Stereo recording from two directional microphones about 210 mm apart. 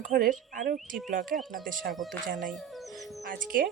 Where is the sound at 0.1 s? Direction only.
40° right (ahead or behind).